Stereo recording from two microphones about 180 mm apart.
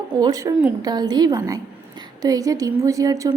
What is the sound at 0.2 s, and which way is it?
A woman's voice, 20° right (ahead or behind).